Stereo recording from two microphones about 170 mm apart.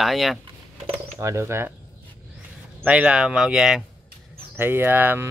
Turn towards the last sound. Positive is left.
turn(degrees=-10)  # may be behind; listen again after turning